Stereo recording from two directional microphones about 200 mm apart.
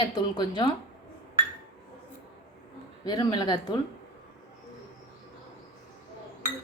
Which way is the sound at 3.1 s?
20° left (ahead or behind).